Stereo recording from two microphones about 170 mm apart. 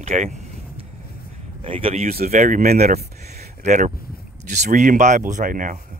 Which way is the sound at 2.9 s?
40° right (ahead or behind).